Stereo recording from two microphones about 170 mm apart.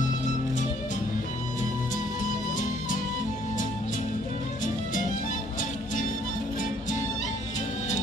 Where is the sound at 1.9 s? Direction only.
50° left (ahead or behind).